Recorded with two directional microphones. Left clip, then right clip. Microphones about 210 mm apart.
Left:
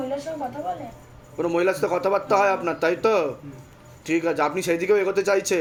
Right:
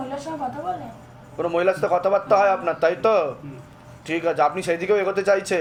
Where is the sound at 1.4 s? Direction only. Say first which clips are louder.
Right 1 dB; 40° left (ahead or behind).